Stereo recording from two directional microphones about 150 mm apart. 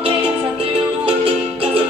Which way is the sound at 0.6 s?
40° right (ahead or behind).